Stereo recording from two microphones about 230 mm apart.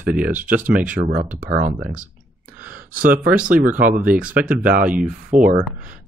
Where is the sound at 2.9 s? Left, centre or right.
Right.